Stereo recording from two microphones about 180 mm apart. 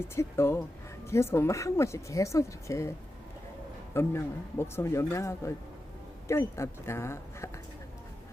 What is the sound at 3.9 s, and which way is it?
Speech, 15° left (ahead or behind).